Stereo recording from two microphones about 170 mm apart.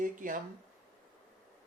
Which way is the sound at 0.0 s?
50° right (ahead or behind).